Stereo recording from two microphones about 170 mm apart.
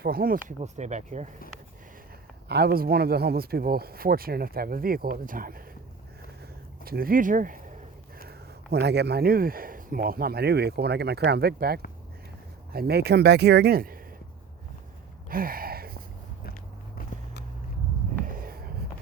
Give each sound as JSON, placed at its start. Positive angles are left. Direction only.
{"t": 0.0, "sound": "speech", "side_deg": -60}
{"t": 2.5, "sound": "speech", "side_deg": -70}
{"t": 6.8, "sound": "speech", "side_deg": -60}
{"t": 8.2, "sound": "speech", "side_deg": -70}
{"t": 15.3, "sound": "a sound", "side_deg": -60}
{"t": 18.2, "sound": "a sound", "side_deg": -55}